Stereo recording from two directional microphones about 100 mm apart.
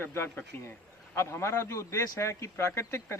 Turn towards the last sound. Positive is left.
turn(degrees=25)  # may be behind; listen again after turning